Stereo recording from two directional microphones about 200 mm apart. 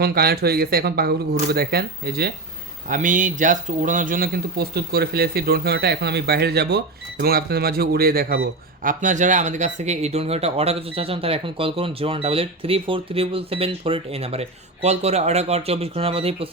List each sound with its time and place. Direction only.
0.0 s speech: 50° right (ahead or behind)
2.9 s speech: 40° right (ahead or behind)